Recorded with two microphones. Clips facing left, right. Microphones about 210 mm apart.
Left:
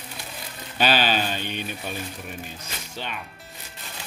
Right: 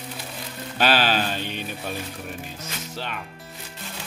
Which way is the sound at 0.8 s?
Centre (ahead or behind).